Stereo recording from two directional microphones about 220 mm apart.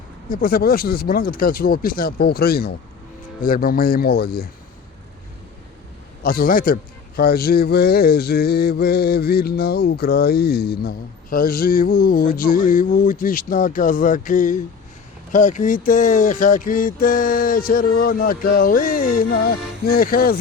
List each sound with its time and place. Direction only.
0.3 s speech: 40° left (ahead or behind)
3.4 s mantra: 40° left (ahead or behind)
6.2 s speech: 40° left (ahead or behind)
7.2 s mantra: 45° left (ahead or behind)
15.3 s speech: 35° left (ahead or behind)